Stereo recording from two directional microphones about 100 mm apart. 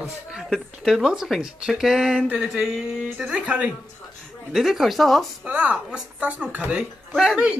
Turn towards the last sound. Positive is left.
turn(degrees=-5)  # may be behind; listen again after turning